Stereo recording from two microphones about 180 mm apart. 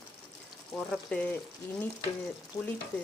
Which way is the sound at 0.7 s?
5° left (ahead or behind).